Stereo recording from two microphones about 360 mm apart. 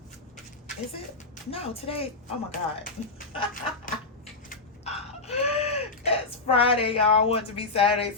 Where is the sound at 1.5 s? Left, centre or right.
Centre.